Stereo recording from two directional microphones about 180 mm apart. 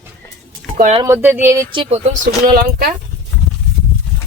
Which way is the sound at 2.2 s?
50° right (ahead or behind).